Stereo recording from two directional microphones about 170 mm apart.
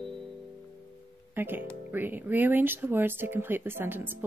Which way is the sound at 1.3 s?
10° right (ahead or behind).